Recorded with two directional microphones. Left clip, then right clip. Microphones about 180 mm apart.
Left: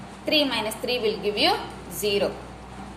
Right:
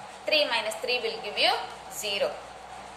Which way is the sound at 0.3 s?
15° left (ahead or behind).